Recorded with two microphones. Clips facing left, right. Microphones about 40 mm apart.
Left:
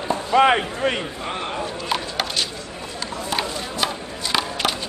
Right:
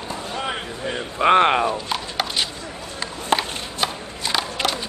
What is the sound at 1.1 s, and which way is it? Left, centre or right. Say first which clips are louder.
Speech: right 12 dB; right.